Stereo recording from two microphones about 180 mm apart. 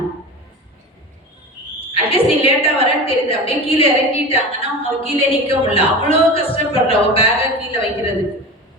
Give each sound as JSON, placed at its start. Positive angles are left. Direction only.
{"t": 1.9, "sound": "a woman's voice", "side_deg": 30}